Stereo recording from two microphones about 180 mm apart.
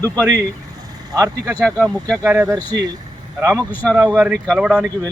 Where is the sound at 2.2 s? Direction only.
10° right (ahead or behind).